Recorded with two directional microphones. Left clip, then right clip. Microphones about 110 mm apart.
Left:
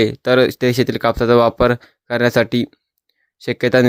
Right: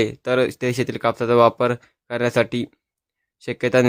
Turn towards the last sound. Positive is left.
turn(degrees=40)  # may be behind; listen again after turning